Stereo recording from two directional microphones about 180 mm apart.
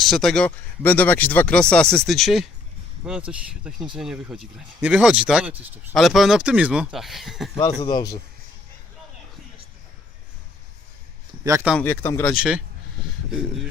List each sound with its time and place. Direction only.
0.0 s speech: centre (ahead or behind)
7.6 s speech: 25° left (ahead or behind)
11.8 s speech: 10° left (ahead or behind)
12.3 s speech: 5° right (ahead or behind)